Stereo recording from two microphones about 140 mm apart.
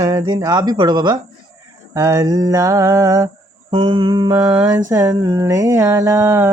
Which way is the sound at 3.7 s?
35° right (ahead or behind).